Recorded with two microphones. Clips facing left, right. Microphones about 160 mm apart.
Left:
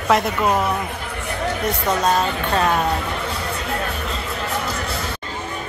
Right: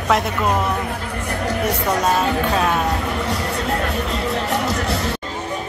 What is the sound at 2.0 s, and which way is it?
Speech, 5° right (ahead or behind).